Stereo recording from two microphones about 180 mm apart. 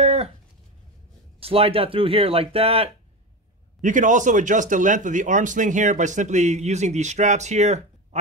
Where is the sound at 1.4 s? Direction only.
30° right (ahead or behind).